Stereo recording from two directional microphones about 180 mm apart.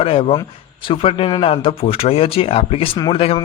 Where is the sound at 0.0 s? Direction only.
30° left (ahead or behind).